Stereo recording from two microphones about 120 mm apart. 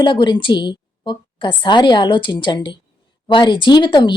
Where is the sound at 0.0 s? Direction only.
40° left (ahead or behind).